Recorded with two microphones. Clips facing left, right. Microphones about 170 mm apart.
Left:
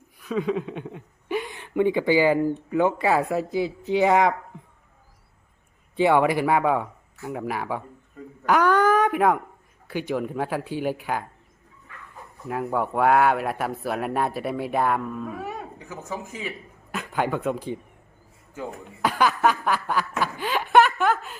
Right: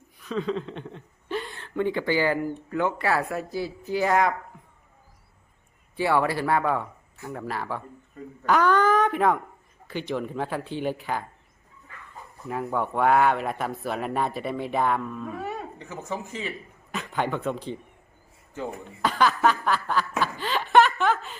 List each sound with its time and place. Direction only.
0.2 s speech: 10° left (ahead or behind)
6.0 s speech: 20° left (ahead or behind)
12.5 s a man's voice: 5° left (ahead or behind)